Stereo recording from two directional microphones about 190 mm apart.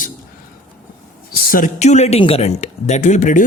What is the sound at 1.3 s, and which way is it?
Speech, 50° left (ahead or behind).